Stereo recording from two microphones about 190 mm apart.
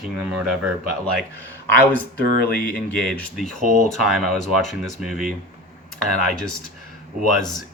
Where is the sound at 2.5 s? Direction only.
5° left (ahead or behind).